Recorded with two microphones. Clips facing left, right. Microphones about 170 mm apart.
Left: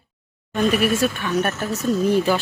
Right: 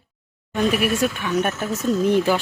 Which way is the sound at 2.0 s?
20° right (ahead or behind).